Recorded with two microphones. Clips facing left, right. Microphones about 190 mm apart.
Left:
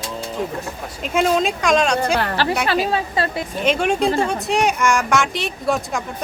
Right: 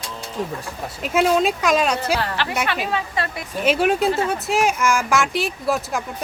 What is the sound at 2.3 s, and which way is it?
A woman's voice, 35° left (ahead or behind).